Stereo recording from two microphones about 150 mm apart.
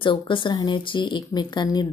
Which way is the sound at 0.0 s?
35° left (ahead or behind).